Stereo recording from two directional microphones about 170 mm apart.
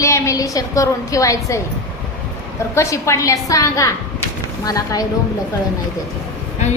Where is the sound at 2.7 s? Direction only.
15° left (ahead or behind).